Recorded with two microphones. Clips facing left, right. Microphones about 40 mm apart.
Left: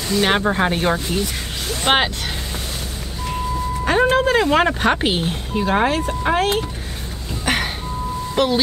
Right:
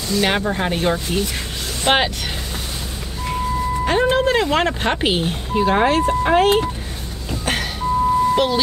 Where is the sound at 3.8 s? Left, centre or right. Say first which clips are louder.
Left 2 dB; centre.